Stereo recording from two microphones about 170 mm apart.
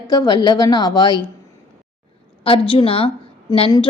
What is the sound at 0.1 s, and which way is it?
A woman's voice, 25° left (ahead or behind).